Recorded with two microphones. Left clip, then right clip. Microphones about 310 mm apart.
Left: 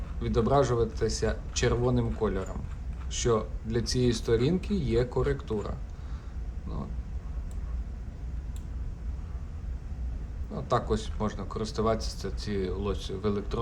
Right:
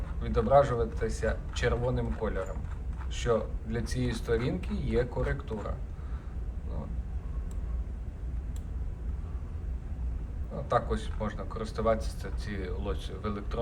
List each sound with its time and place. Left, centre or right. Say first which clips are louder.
0.2 s speech: right 2 dB; centre
10.7 s speech: left 1 dB; centre